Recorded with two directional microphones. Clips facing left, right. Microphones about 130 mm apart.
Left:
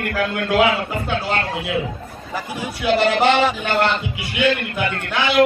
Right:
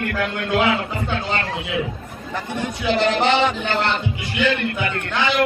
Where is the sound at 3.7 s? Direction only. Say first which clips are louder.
Left 2 dB; 60° left (ahead or behind).